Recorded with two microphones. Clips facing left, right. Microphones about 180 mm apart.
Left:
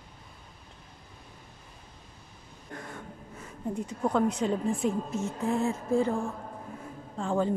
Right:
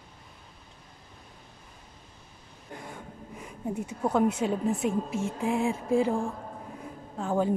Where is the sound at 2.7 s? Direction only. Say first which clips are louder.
Even; 15° right (ahead or behind).